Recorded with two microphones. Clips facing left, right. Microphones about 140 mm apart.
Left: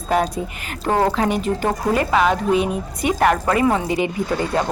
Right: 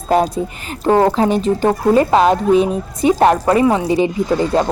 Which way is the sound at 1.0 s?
30° right (ahead or behind).